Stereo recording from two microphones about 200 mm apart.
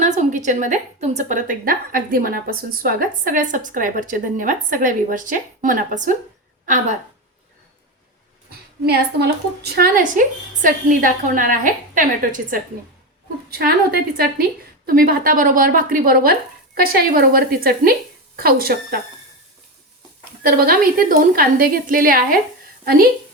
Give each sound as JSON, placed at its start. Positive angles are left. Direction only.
{"t": 0.0, "sound": "a woman's voice", "side_deg": -35}
{"t": 8.4, "sound": "a woman's voice", "side_deg": -50}
{"t": 20.4, "sound": "a woman's voice", "side_deg": -45}